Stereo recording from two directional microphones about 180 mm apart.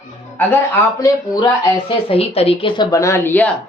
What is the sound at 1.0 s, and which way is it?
Speech, 20° left (ahead or behind).